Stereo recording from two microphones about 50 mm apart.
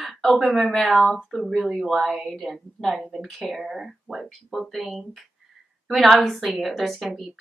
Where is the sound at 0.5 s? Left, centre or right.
Centre.